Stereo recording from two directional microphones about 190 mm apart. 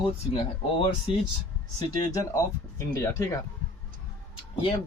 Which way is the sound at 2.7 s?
15° left (ahead or behind).